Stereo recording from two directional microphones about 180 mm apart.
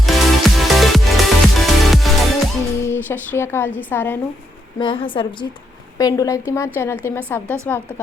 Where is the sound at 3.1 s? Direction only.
10° left (ahead or behind).